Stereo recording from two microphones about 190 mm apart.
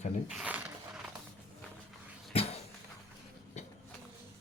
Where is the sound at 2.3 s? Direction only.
30° left (ahead or behind).